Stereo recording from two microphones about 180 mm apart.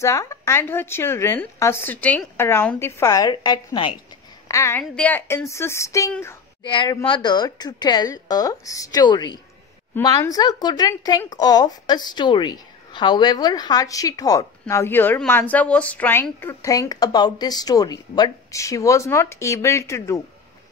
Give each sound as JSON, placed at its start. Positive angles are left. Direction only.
{"t": 0.0, "sound": "speech", "side_deg": 15}
{"t": 6.6, "sound": "speech", "side_deg": 25}